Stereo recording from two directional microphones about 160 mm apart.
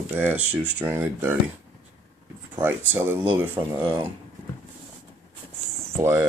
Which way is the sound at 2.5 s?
15° right (ahead or behind).